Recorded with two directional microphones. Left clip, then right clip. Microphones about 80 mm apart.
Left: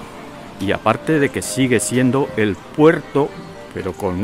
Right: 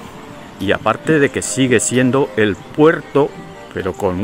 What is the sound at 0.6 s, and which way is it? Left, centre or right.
Speech, centre.